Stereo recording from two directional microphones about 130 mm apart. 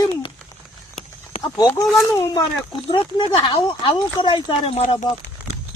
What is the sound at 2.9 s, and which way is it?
Speech, 40° left (ahead or behind).